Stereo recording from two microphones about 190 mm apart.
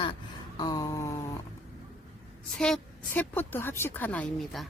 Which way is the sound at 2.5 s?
5° left (ahead or behind).